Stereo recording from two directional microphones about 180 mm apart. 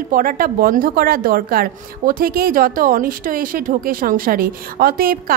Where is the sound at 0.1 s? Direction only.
50° right (ahead or behind).